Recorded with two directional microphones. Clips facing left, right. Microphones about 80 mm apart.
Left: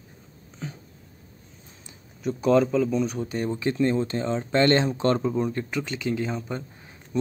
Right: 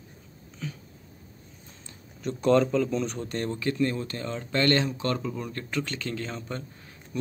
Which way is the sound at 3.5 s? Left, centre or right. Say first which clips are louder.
Left 5 dB; left.